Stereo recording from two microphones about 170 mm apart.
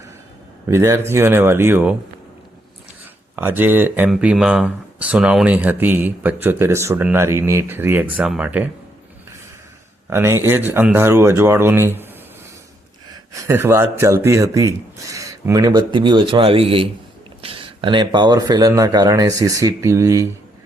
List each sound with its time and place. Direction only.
0.7 s speech: 15° right (ahead or behind)
3.3 s speech: 10° right (ahead or behind)
10.1 s speech: 15° right (ahead or behind)
13.3 s speech: 15° right (ahead or behind)